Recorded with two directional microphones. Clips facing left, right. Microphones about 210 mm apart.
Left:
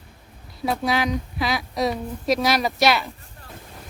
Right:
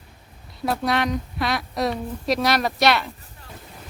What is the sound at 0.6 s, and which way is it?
Speech, centre (ahead or behind).